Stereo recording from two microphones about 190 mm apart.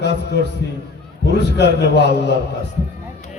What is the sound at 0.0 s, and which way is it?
A man's voice, 65° left (ahead or behind).